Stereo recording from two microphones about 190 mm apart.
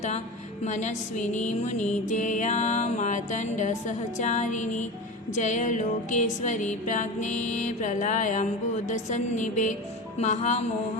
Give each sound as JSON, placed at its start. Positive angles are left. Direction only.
{"t": 0.6, "sound": "music", "side_deg": 40}